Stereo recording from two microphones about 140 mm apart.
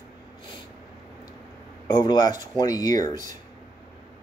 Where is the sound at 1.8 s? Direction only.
30° left (ahead or behind).